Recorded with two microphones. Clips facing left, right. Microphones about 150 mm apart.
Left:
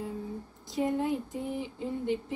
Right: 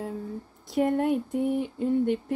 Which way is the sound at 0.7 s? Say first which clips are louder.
Right 5 dB; 60° right (ahead or behind).